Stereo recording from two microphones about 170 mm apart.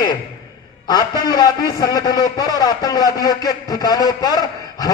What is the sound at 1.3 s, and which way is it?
Speech, 25° left (ahead or behind).